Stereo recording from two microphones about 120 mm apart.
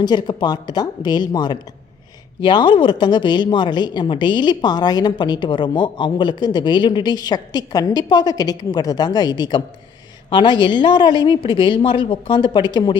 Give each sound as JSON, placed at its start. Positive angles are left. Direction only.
{"t": 0.0, "sound": "speech", "side_deg": 35}